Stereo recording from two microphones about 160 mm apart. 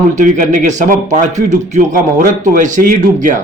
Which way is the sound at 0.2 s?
55° right (ahead or behind).